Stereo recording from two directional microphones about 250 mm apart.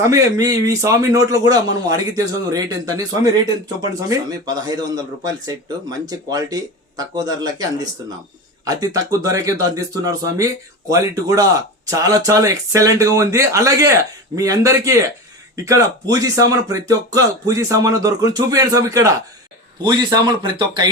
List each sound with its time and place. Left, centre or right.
0.0 s speech: centre